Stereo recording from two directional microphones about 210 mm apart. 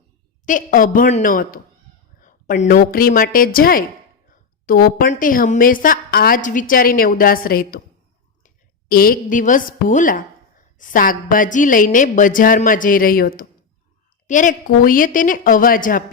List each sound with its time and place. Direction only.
0.4 s a woman's voice: 40° left (ahead or behind)